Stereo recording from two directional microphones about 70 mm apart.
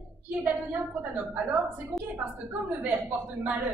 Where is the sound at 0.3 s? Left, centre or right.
Right.